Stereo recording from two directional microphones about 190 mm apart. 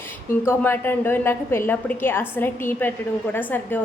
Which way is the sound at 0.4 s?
10° left (ahead or behind).